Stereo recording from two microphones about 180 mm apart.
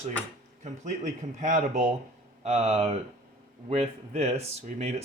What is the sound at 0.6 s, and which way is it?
Speech, 40° right (ahead or behind).